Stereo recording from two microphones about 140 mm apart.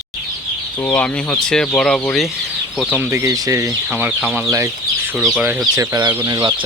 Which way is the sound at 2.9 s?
15° right (ahead or behind).